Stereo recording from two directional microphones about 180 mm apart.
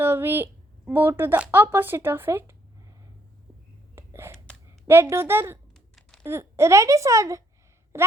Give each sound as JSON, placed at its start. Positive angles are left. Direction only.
{"t": 0.0, "sound": "speech", "side_deg": -10}
{"t": 3.9, "sound": "whispering", "side_deg": -15}
{"t": 4.9, "sound": "a woman's voice", "side_deg": -15}